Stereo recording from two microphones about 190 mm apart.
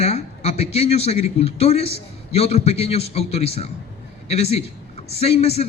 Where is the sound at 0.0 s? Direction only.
35° left (ahead or behind).